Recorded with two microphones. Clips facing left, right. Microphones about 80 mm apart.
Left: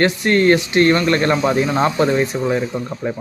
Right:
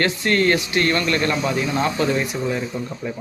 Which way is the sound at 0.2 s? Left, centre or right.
Left.